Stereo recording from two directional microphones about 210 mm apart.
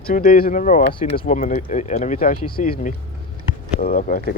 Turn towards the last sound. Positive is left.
turn(degrees=40)  # may be behind; listen again after turning